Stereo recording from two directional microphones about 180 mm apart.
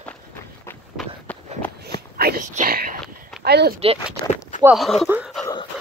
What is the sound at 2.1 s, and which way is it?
Whispering, 60° right (ahead or behind).